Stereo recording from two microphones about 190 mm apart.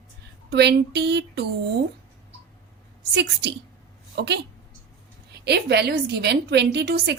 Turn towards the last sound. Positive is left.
turn(degrees=-60)  # may be behind; listen again after turning